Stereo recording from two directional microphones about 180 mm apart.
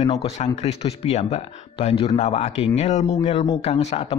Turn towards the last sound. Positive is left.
turn(degrees=35)  # may be behind; listen again after turning